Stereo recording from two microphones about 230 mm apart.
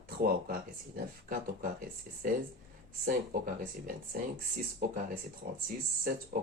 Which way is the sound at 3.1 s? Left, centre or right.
Right.